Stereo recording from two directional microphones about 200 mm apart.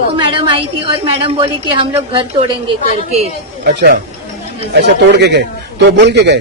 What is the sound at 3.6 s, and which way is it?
A man's voice, 50° right (ahead or behind).